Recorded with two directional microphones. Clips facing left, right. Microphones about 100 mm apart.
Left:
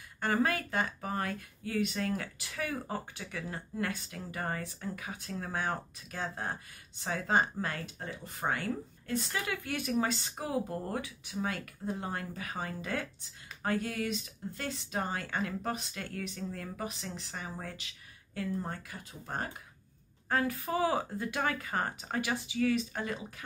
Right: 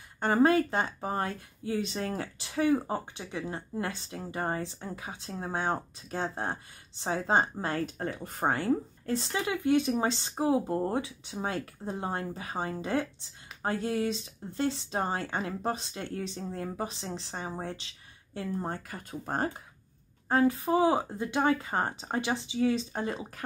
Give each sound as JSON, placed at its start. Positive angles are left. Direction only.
{"t": 0.2, "sound": "speech", "side_deg": -25}
{"t": 7.8, "sound": "speech", "side_deg": -50}
{"t": 8.5, "sound": "speech", "side_deg": -30}
{"t": 18.8, "sound": "speech", "side_deg": -45}